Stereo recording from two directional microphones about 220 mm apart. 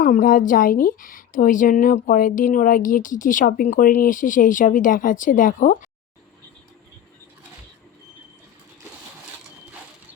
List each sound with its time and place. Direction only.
0.0 s a woman's voice: 40° left (ahead or behind)